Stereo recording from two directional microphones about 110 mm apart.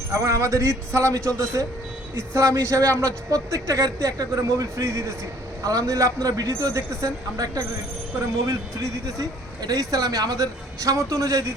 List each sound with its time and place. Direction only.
0.1 s speech: 25° right (ahead or behind)